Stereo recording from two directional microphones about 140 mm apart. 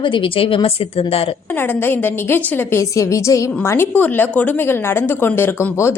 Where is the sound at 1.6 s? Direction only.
15° left (ahead or behind).